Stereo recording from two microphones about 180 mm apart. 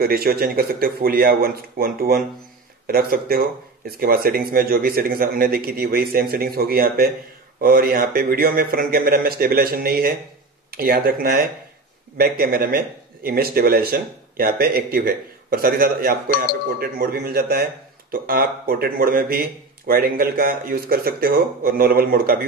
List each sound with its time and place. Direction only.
0.0 s a man's voice: 55° right (ahead or behind)